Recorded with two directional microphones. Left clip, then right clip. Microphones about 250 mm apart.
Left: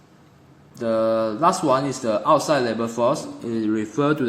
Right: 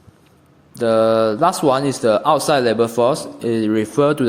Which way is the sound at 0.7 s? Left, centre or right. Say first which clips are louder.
Right 6 dB; right.